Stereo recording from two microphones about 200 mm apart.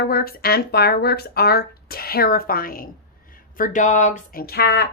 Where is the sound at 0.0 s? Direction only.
50° left (ahead or behind).